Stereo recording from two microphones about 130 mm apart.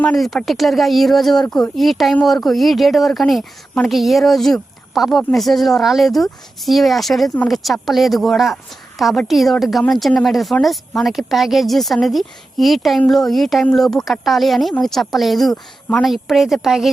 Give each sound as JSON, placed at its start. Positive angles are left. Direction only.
{"t": 0.0, "sound": "a woman's voice", "side_deg": 5}